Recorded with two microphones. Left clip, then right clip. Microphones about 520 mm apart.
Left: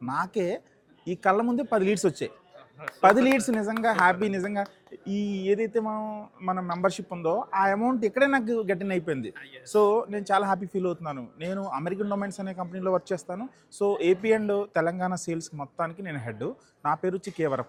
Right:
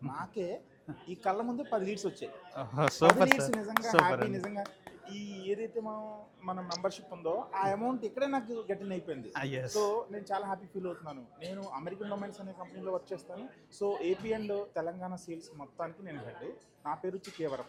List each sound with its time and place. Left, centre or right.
0.1 s speech: left
2.8 s speech: right
3.3 s speech: left
9.3 s speech: right
9.7 s speech: left